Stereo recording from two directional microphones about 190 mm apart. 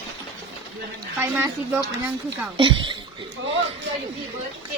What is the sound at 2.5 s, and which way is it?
Speech, 25° right (ahead or behind).